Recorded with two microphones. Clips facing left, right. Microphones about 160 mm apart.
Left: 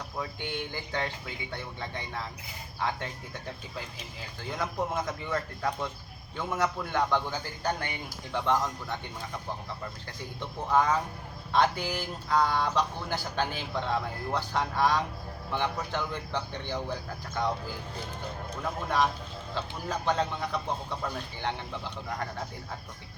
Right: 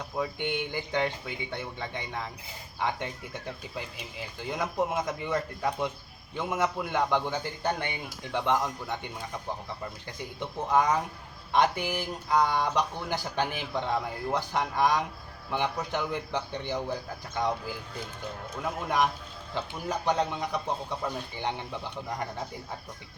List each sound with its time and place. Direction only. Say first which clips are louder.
0.2 s speech: right 5 dB; 20° right (ahead or behind)
4.4 s speech: right 3 dB; 20° right (ahead or behind)
10.4 s speech: right 1 dB; 15° right (ahead or behind)
18.6 s speech: right 1 dB; 15° right (ahead or behind)